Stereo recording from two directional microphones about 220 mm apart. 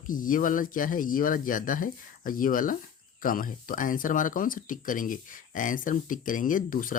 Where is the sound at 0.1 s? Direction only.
40° left (ahead or behind).